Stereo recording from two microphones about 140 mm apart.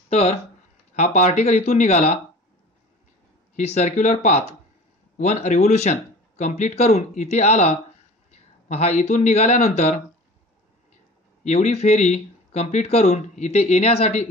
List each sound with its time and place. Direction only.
0.1 s speech: 45° left (ahead or behind)
0.9 s speech: 55° left (ahead or behind)
3.5 s speech: 55° left (ahead or behind)
11.4 s speech: 55° left (ahead or behind)